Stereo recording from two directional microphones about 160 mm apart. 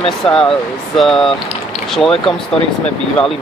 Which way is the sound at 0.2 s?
5° left (ahead or behind).